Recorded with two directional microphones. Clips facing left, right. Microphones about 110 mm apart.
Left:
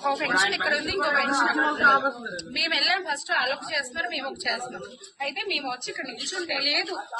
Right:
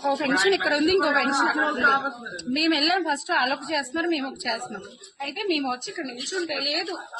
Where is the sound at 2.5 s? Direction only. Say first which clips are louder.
Right 7 dB; 45° right (ahead or behind).